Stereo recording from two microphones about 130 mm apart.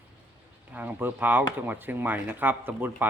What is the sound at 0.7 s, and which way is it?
Speech, 15° right (ahead or behind).